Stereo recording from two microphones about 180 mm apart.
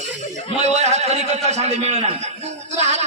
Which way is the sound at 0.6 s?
40° right (ahead or behind).